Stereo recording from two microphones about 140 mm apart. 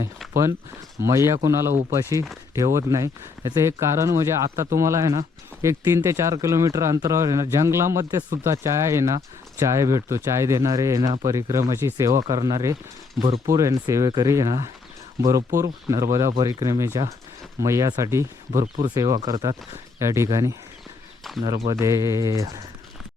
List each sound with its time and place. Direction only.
0.9 s speech: 20° right (ahead or behind)
13.2 s speech: 40° right (ahead or behind)
13.5 s speech: 25° right (ahead or behind)
21.2 s a sound: centre (ahead or behind)
21.7 s speech: 25° right (ahead or behind)